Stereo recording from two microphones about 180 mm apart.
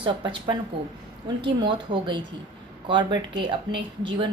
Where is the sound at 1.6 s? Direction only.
25° right (ahead or behind).